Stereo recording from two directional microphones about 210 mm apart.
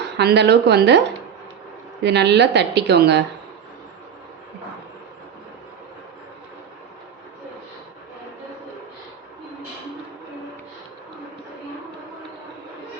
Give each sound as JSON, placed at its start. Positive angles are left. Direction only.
{"t": 0.0, "sound": "a woman's voice", "side_deg": -50}